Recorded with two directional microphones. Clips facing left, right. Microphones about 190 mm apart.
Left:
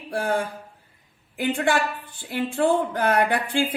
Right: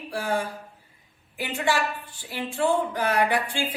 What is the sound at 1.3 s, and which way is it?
A woman's voice, 55° left (ahead or behind).